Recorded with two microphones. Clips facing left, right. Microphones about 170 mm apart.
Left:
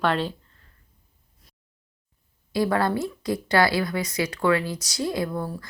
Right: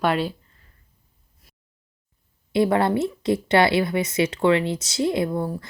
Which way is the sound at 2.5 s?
25° right (ahead or behind).